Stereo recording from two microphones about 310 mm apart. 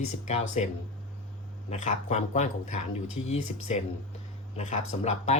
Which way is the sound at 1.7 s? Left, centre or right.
Left.